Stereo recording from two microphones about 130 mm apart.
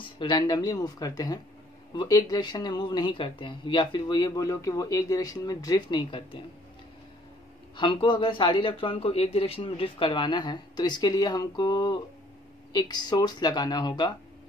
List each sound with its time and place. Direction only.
0.0 s speech: 35° left (ahead or behind)
7.7 s speech: 35° left (ahead or behind)